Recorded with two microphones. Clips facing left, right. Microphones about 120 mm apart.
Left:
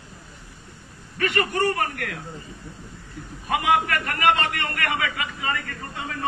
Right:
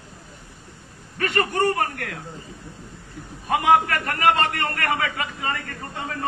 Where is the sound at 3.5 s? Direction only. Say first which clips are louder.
Right 3 dB; 30° right (ahead or behind).